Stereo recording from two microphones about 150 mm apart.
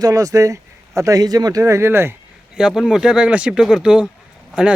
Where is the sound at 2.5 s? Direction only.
5° right (ahead or behind).